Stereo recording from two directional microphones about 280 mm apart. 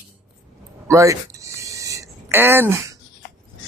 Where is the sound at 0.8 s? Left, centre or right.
Centre.